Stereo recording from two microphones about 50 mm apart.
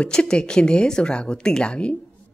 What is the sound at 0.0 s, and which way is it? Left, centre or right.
A woman's voice, centre.